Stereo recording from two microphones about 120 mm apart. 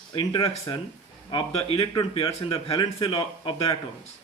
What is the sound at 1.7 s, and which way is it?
Speech, 45° left (ahead or behind).